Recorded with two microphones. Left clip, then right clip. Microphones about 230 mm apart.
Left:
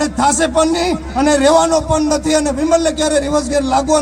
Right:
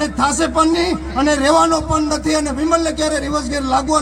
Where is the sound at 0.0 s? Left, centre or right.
Left.